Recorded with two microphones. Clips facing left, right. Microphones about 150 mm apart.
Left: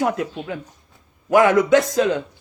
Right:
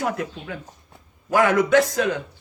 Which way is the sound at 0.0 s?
20° left (ahead or behind).